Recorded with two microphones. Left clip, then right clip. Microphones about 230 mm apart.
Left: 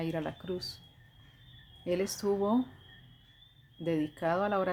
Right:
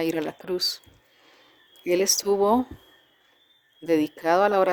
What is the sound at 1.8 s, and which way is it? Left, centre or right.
Speech, right.